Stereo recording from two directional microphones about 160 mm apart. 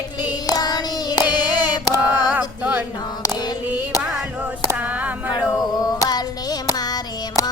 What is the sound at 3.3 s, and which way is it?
Female singing, 25° left (ahead or behind).